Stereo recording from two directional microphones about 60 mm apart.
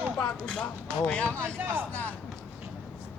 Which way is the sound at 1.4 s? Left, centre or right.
Right.